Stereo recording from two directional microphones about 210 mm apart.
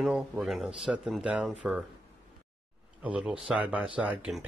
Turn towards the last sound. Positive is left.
turn(degrees=-5)  # may be behind; listen again after turning